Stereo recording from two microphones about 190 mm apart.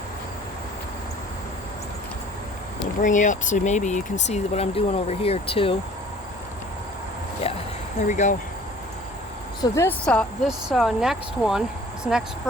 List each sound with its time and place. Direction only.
3.0 s speech: 40° left (ahead or behind)
7.4 s a sound: 30° left (ahead or behind)
8.0 s speech: 40° left (ahead or behind)
9.6 s speech: 15° left (ahead or behind); by 12.2 s 5° right (ahead or behind)